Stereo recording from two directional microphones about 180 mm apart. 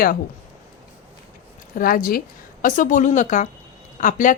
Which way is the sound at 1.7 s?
50° left (ahead or behind).